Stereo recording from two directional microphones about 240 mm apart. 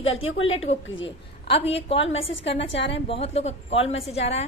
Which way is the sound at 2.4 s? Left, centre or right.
Left.